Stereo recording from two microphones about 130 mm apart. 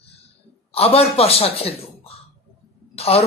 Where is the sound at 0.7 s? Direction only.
50° left (ahead or behind).